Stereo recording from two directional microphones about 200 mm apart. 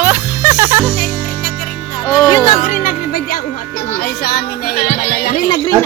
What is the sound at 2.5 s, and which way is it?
Music, 40° left (ahead or behind).